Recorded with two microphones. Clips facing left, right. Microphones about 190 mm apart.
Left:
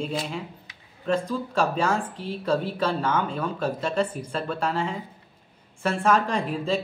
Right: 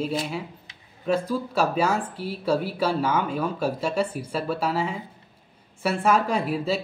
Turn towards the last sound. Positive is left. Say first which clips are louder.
# right 1 dB
turn(degrees=-5)  # may be behind; listen again after turning